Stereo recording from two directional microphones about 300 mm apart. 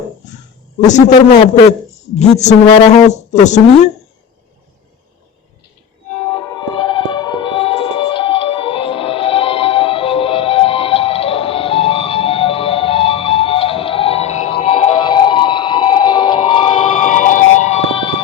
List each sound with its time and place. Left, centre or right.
0.8 s a woman's voice: left
6.7 s music: centre